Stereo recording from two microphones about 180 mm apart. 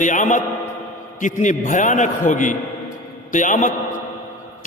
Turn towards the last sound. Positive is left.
turn(degrees=45)  # may be behind; listen again after turning